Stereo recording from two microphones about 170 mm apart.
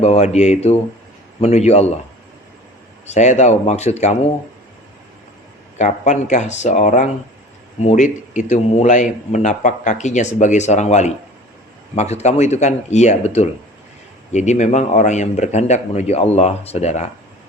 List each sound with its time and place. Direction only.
0.0 s speech: 40° left (ahead or behind)
3.1 s speech: 45° left (ahead or behind)
5.7 s a man's voice: 45° left (ahead or behind)